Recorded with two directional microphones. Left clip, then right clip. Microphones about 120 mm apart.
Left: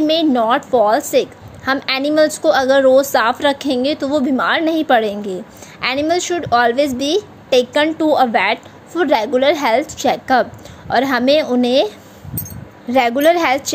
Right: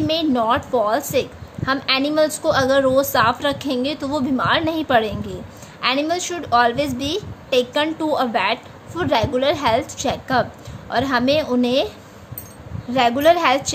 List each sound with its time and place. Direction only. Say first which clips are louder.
0.0 s a woman's voice: left 5 dB; 40° left (ahead or behind)
12.9 s a woman's voice: left 2 dB; 55° left (ahead or behind)